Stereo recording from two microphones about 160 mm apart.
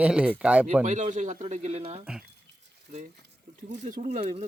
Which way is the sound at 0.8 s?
50° right (ahead or behind).